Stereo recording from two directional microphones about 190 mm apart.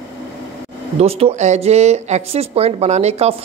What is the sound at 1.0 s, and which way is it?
A woman's voice, 30° right (ahead or behind).